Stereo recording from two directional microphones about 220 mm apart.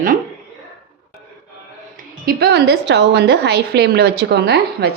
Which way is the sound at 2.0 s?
45° right (ahead or behind).